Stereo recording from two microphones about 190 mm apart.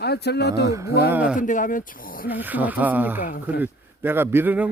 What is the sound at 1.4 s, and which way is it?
Speech, 45° left (ahead or behind).